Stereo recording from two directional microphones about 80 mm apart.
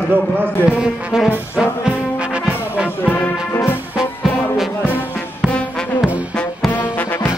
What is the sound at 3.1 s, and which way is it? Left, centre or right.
Music, left.